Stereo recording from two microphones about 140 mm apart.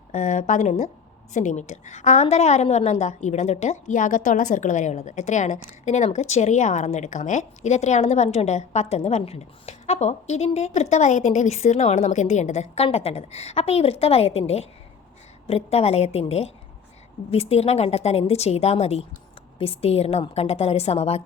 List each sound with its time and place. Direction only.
0.1 s a woman's voice: 60° left (ahead or behind)